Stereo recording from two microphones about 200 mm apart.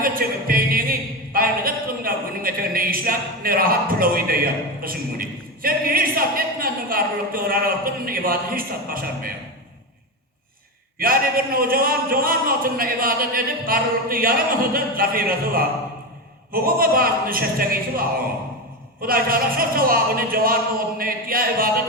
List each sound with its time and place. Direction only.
0.0 s a sound: 45° right (ahead or behind)
4.8 s a woman's voice: 45° right (ahead or behind)
10.9 s speech: 45° right (ahead or behind)
19.0 s speech: 45° right (ahead or behind)